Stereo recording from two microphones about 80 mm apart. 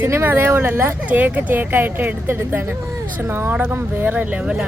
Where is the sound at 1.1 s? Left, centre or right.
Centre.